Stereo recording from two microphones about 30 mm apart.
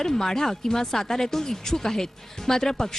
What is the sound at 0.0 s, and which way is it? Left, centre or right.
Speech, centre.